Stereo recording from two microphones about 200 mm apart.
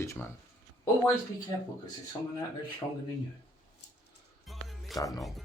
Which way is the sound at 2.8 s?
15° left (ahead or behind).